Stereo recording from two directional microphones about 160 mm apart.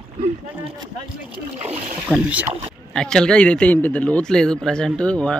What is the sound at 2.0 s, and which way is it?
Speech, 10° right (ahead or behind).